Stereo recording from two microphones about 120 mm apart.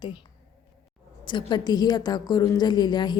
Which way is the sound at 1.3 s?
40° left (ahead or behind).